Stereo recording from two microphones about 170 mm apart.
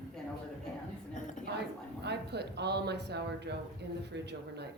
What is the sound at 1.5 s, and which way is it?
Speech, 80° right.